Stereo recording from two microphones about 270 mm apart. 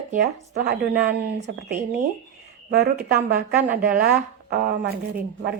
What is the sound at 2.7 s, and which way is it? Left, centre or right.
Speech, right.